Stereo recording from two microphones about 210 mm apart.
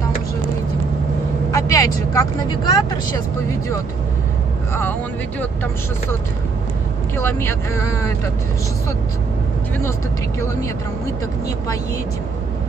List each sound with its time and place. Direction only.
1.5 s speech: 15° left (ahead or behind)
7.2 s speech: 10° left (ahead or behind)